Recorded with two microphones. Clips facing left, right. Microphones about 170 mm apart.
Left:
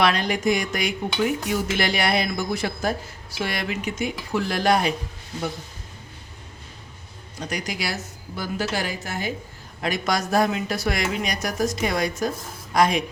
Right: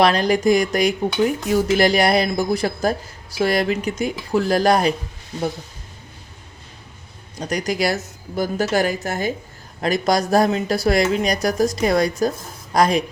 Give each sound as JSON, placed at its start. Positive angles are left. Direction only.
{"t": 0.0, "sound": "speech", "side_deg": -35}
{"t": 7.3, "sound": "a woman's voice", "side_deg": -40}